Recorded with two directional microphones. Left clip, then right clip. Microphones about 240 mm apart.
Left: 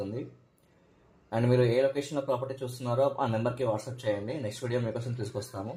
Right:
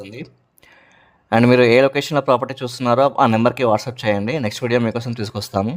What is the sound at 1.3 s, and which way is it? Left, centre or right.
Speech, right.